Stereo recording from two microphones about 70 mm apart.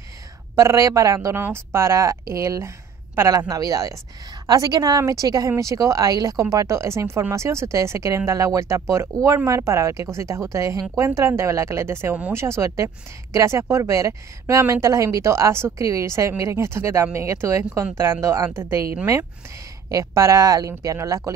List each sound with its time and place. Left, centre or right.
0.6 s speech: right
1.3 s speech: right
3.4 s a woman's voice: right
4.5 s a woman's voice: right
19.9 s speech: right